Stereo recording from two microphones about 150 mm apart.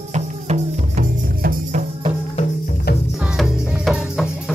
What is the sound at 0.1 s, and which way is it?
Music, 50° right (ahead or behind).